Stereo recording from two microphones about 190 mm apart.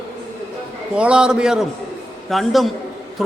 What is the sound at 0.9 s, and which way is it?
A man's voice, 5° right (ahead or behind).